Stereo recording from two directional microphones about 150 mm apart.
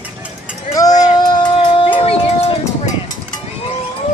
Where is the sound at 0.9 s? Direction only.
25° left (ahead or behind).